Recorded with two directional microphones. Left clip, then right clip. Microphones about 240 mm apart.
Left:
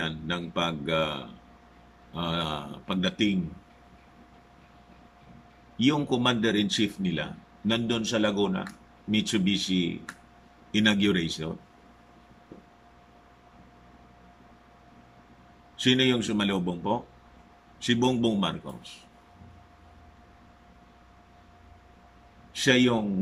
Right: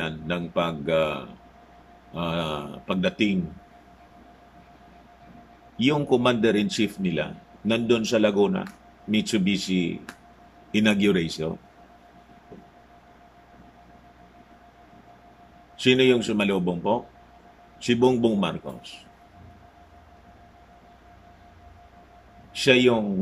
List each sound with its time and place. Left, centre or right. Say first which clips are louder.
0.0 s a man's voice: right 2 dB; centre
5.8 s a man's voice: right 4 dB; centre
15.8 s a man's voice: right 5 dB; centre
22.5 s a man's voice: right 4 dB; centre